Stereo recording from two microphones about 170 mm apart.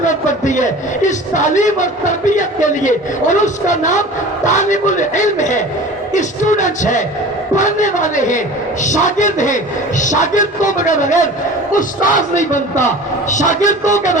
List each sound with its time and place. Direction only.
0.0 s a man's voice: 45° left (ahead or behind)